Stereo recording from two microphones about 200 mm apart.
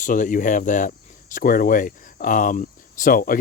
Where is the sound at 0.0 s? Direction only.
40° left (ahead or behind).